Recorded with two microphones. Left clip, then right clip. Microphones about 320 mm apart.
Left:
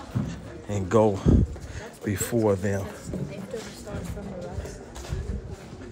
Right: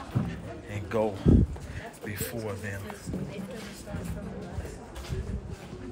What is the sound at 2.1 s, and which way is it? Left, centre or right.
Speech, centre.